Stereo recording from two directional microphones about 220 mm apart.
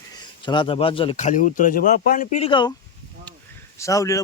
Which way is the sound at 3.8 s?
15° left (ahead or behind).